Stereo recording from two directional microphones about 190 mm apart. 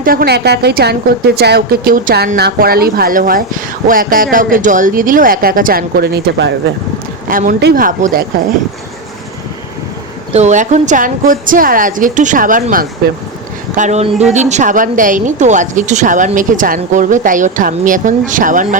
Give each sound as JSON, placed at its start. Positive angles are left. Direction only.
{"t": 0.0, "sound": "a woman's voice", "side_deg": -50}
{"t": 7.3, "sound": "speech", "side_deg": -45}
{"t": 10.3, "sound": "speech", "side_deg": -40}